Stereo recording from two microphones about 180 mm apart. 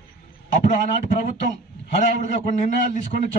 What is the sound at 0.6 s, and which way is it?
A man's voice, 45° left (ahead or behind).